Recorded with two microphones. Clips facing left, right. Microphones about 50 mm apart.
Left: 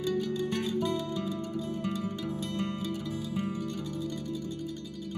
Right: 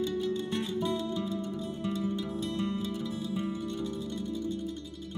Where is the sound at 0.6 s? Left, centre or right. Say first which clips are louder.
Left 1 dB; left.